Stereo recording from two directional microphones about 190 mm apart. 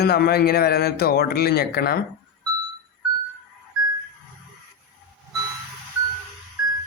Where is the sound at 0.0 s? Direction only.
55° left (ahead or behind).